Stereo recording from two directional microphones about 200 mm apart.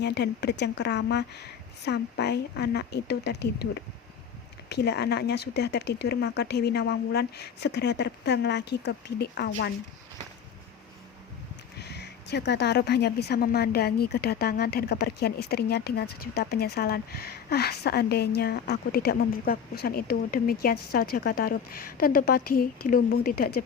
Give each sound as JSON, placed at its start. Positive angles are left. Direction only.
{"t": 0.0, "sound": "speech", "side_deg": 55}
{"t": 11.8, "sound": "a woman's voice", "side_deg": 55}